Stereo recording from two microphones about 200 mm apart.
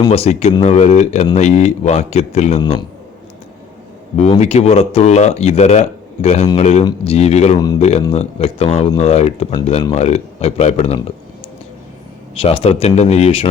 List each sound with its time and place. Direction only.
0.0 s speech: 30° left (ahead or behind)
2.6 s speech: 20° left (ahead or behind)
4.2 s speech: 35° left (ahead or behind)
12.4 s speech: 25° left (ahead or behind)